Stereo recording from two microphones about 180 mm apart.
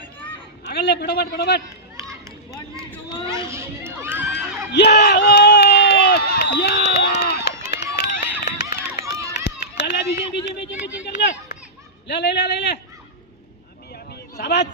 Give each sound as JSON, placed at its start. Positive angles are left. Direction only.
{"t": 0.7, "sound": "a man's voice", "side_deg": 70}
{"t": 3.2, "sound": "a sound", "side_deg": -15}
{"t": 4.7, "sound": "speech", "side_deg": 65}
{"t": 5.0, "sound": "run", "side_deg": 65}
{"t": 12.0, "sound": "a man's voice", "side_deg": 70}
{"t": 13.9, "sound": "a sound", "side_deg": 65}